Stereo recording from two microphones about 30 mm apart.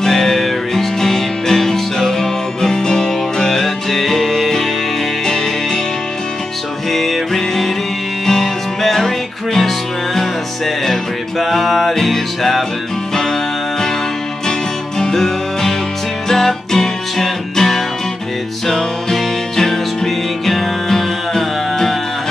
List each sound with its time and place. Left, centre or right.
0.0 s music: centre
6.9 s music: centre
11.3 s music: centre
15.0 s music: centre
20.9 s music: centre